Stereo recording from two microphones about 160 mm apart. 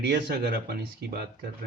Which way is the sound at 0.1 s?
90° right.